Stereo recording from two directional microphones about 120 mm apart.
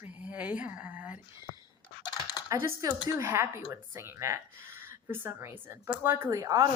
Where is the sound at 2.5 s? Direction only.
25° right (ahead or behind).